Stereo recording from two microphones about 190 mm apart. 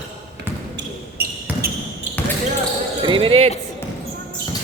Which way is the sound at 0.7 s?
55° right (ahead or behind).